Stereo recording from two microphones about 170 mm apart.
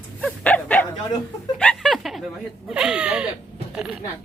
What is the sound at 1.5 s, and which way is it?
Speech, 5° left (ahead or behind).